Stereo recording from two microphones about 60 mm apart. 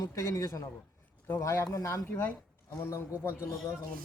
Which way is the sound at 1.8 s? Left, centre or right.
Left.